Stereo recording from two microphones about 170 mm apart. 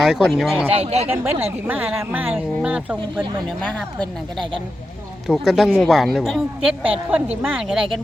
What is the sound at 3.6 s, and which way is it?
Speech, 5° left (ahead or behind).